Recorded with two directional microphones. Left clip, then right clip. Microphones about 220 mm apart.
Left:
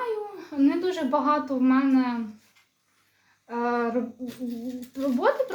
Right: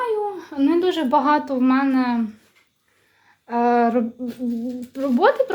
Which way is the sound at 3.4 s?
50° right (ahead or behind).